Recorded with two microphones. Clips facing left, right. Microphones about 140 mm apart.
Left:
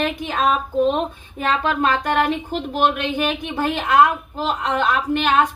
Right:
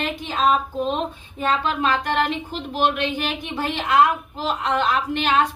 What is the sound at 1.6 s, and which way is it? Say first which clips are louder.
A woman's voice: left 2 dB; 50° left (ahead or behind).